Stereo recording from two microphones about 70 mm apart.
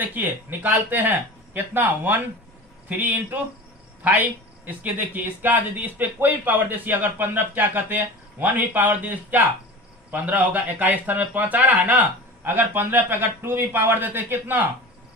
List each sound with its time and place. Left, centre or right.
0.0 s a man's voice: right